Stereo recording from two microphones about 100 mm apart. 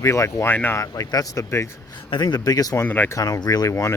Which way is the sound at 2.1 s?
45° left (ahead or behind).